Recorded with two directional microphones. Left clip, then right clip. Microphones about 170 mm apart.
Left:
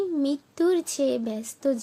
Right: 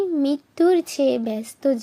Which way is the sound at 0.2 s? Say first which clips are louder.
Right 5 dB; 15° right (ahead or behind).